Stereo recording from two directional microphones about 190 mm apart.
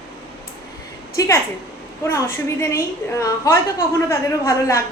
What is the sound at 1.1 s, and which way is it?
Speech, 15° left (ahead or behind).